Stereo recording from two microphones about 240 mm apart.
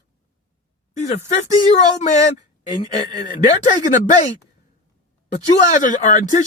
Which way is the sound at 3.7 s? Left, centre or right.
Left.